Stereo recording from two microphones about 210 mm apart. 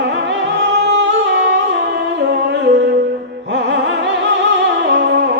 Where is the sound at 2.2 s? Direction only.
55° right (ahead or behind).